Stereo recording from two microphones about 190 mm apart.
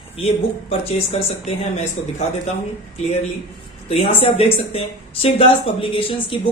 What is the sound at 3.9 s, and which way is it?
Speech, 30° left (ahead or behind).